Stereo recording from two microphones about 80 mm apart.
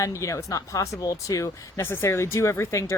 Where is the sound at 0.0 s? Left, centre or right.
Left.